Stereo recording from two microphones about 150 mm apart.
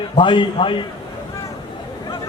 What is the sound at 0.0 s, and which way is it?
Speech, 35° left (ahead or behind).